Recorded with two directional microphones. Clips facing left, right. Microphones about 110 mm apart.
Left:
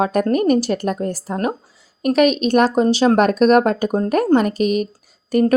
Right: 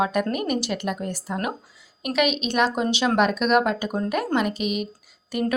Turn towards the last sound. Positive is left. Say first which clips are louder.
# left 9 dB
turn(degrees=40)  # may be behind; listen again after turning